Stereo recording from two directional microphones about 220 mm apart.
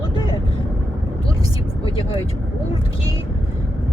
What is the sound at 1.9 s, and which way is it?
Vehicle, 25° left (ahead or behind).